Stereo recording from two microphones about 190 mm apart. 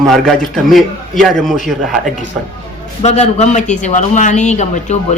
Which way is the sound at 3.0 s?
35° left (ahead or behind).